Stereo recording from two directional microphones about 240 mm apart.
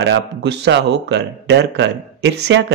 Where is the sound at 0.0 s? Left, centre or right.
Right.